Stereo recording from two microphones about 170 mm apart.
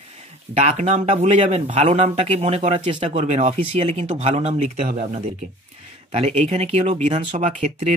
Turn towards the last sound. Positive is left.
turn(degrees=-45)  # may be behind; listen again after turning